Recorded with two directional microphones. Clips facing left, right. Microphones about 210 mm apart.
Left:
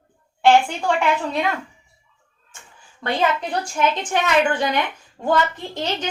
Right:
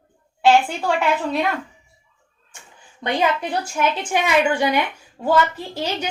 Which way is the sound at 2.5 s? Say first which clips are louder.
Even; 15° right (ahead or behind).